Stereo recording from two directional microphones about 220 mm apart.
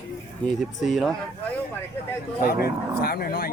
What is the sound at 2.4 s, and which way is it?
Speech, 45° left (ahead or behind).